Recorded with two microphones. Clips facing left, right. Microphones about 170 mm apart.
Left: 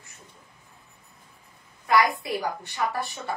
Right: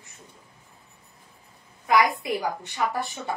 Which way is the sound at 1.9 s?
20° right (ahead or behind).